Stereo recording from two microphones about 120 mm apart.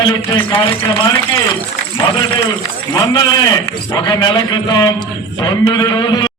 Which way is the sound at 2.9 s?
35° left (ahead or behind).